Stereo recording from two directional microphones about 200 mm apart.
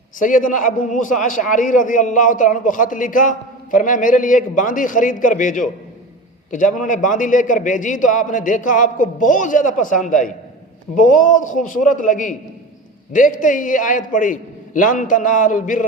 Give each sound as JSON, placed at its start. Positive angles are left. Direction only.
{"t": 0.2, "sound": "a man's voice", "side_deg": 40}